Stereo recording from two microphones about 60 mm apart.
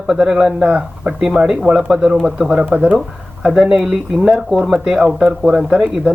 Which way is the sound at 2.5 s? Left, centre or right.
Right.